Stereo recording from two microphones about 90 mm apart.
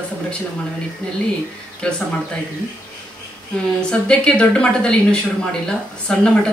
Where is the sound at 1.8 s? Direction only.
10° left (ahead or behind).